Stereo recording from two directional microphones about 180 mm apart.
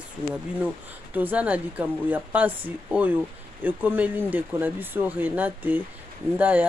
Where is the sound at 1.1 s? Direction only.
10° right (ahead or behind).